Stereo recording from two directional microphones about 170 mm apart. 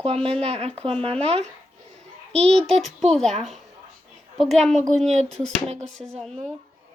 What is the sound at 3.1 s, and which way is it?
Speech, centre (ahead or behind).